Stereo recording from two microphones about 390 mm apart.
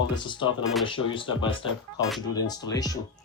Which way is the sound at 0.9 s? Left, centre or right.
Centre.